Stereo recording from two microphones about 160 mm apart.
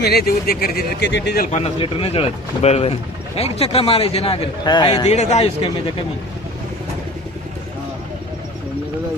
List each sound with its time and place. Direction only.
0.0 s speech: 75° left (ahead or behind)
1.5 s a man's voice: 40° left (ahead or behind)
5.0 s a man's voice: 45° left (ahead or behind)